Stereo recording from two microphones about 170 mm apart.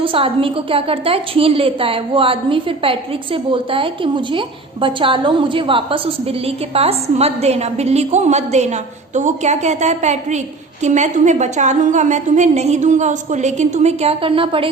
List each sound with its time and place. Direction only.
0.0 s a woman's voice: 30° right (ahead or behind)